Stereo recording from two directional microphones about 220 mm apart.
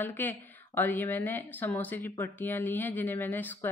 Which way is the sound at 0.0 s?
10° left (ahead or behind).